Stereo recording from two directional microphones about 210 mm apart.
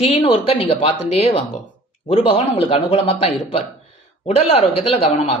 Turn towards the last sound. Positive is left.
turn(degrees=30)  # may be behind; listen again after turning